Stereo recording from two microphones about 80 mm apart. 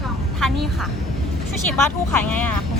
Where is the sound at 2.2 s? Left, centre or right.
Centre.